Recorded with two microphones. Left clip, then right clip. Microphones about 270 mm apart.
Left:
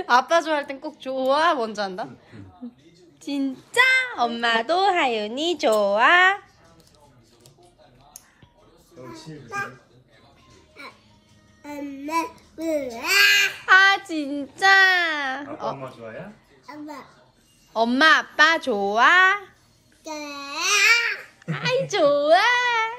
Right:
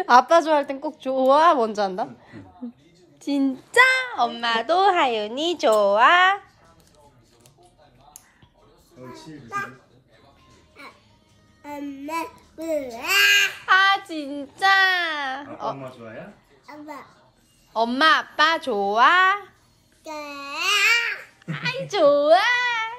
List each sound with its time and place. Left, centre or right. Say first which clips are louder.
0.0 s a woman's voice: right 3 dB; right; by 6.4 s centre
12.1 s a child's voice: left 4 dB; centre
20.0 s speech: even; centre
21.9 s speech: right 2 dB; centre
22.6 s cat: left 2 dB; centre